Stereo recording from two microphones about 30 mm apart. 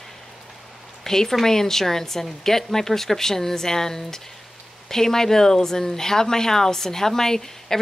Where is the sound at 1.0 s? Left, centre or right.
Centre.